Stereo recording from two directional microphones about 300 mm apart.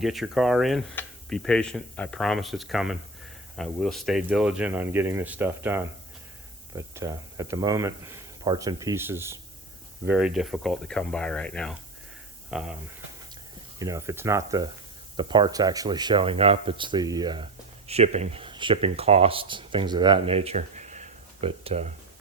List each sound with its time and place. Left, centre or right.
0.0 s speech: centre
13.7 s speech: centre